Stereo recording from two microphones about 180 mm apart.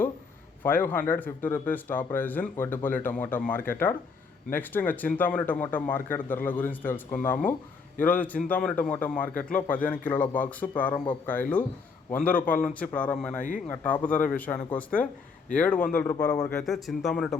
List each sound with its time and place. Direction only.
0.6 s a man's voice: 10° left (ahead or behind)